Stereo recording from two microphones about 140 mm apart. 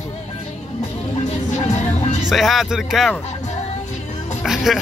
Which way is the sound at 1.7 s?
55° left (ahead or behind).